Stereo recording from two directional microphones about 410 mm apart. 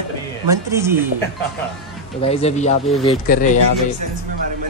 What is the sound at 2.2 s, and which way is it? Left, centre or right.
Speech, centre.